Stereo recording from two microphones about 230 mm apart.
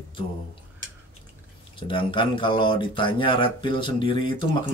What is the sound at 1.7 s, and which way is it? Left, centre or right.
Speech, left.